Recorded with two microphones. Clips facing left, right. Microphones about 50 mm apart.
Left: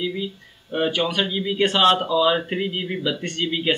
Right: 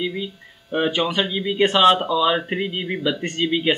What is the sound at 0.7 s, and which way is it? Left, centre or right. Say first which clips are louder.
Speech: right 1 dB; centre.